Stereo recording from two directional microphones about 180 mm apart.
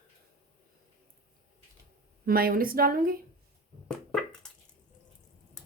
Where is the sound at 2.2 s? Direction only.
55° right (ahead or behind).